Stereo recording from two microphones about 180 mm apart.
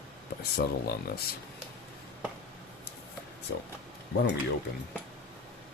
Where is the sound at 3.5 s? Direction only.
70° left (ahead or behind).